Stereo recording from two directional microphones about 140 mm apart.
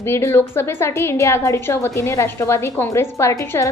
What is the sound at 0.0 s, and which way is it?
A woman's voice, 15° left (ahead or behind).